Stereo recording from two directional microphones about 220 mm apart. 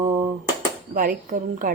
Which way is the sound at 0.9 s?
35° right (ahead or behind).